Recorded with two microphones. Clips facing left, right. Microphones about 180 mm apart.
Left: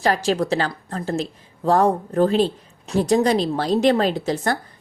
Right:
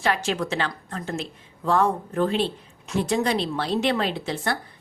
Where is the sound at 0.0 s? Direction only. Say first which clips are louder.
Left 5 dB; 35° left (ahead or behind).